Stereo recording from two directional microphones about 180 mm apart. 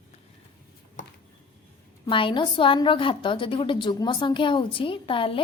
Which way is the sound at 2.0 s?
25° left (ahead or behind).